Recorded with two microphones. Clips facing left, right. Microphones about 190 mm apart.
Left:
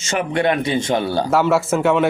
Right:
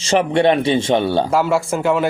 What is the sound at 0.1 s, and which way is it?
A man's voice, 25° right (ahead or behind).